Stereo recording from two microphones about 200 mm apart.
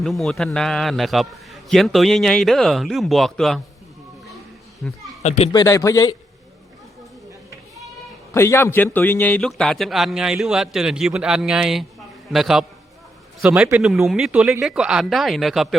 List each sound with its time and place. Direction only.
0.0 s a man's voice: centre (ahead or behind)
4.8 s a man's voice: 5° left (ahead or behind)
5.2 s speech: 35° left (ahead or behind)
5.5 s speech: 20° left (ahead or behind)
8.3 s a man's voice: 15° left (ahead or behind)